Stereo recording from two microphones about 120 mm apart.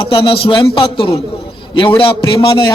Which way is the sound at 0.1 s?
50° left (ahead or behind).